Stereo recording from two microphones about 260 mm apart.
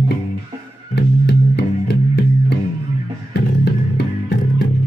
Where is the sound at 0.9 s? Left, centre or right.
Left.